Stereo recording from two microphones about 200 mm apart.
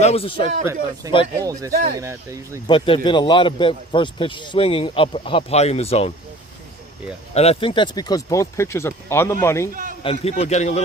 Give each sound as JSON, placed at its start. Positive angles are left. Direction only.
{"t": 0.0, "sound": "a man's voice", "side_deg": 30}
{"t": 0.6, "sound": "speech", "side_deg": -15}
{"t": 2.6, "sound": "a man's voice", "side_deg": 25}
{"t": 7.3, "sound": "speech", "side_deg": 30}
{"t": 10.0, "sound": "a man's voice", "side_deg": 30}